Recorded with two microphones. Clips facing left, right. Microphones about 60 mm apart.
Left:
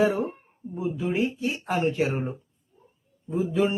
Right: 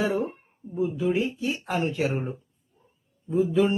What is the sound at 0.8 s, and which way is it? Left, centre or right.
Speech, centre.